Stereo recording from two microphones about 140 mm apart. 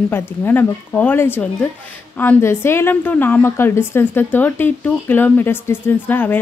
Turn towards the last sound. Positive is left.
turn(degrees=15)  # may be behind; listen again after turning